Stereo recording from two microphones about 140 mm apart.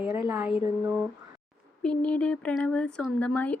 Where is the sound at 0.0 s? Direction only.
15° right (ahead or behind).